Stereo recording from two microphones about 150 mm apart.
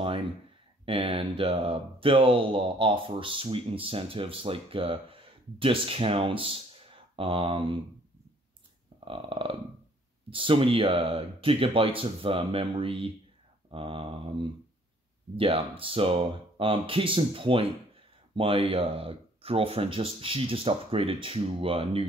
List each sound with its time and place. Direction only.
0.8 s speech: 35° right (ahead or behind)
9.0 s speech: 35° right (ahead or behind)